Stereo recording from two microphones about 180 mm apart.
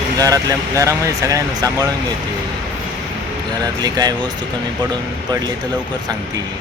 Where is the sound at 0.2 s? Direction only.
20° right (ahead or behind).